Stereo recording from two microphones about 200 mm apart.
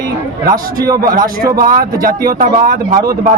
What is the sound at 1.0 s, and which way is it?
Speech, 45° right (ahead or behind).